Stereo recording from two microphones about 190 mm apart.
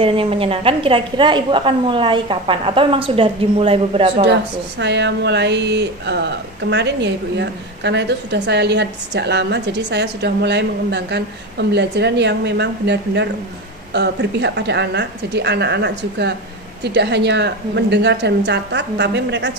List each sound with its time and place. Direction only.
0.0 s a woman's voice: 30° right (ahead or behind)
4.3 s a woman's voice: 65° right (ahead or behind)